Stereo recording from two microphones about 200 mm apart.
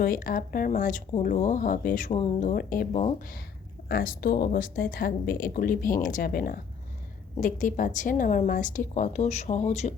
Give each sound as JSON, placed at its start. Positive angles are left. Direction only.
{"t": 0.0, "sound": "speech", "side_deg": 45}